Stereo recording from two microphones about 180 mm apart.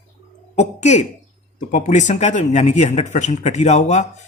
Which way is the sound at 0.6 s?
40° left (ahead or behind).